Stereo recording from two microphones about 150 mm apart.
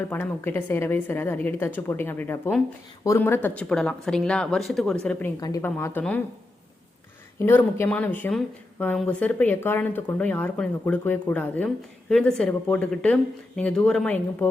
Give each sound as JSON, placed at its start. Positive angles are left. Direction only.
{"t": 0.1, "sound": "speech", "side_deg": 15}
{"t": 5.6, "sound": "speech", "side_deg": 15}
{"t": 7.3, "sound": "speech", "side_deg": 15}